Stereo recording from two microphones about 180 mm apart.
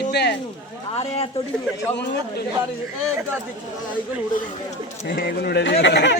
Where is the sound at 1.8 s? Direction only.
70° left (ahead or behind).